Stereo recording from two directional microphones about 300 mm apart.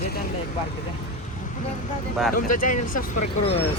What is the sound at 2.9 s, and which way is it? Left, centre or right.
Speech, left.